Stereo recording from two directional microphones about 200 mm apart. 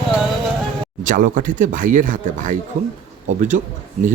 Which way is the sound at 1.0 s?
40° right (ahead or behind).